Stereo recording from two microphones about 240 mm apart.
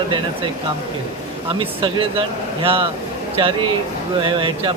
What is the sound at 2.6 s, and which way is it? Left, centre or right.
Speech, right.